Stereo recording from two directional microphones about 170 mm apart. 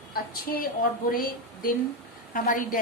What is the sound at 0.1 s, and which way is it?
A woman's voice, 60° left (ahead or behind).